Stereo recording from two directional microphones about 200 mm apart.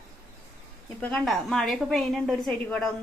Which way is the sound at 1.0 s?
5° left (ahead or behind).